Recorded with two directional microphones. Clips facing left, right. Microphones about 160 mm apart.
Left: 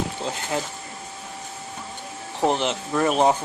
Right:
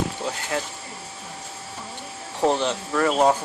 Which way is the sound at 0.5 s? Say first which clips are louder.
Left 1 dB; 20° left (ahead or behind).